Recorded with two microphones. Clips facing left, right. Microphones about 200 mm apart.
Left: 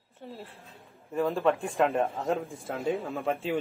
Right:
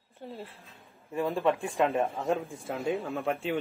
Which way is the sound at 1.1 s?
Centre (ahead or behind).